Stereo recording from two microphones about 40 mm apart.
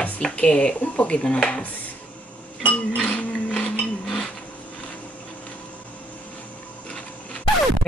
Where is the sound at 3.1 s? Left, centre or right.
Left.